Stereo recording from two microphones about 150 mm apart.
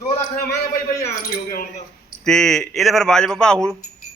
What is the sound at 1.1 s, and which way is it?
Coin, 65° left (ahead or behind).